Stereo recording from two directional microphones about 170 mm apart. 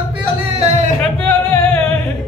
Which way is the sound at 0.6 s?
40° right (ahead or behind).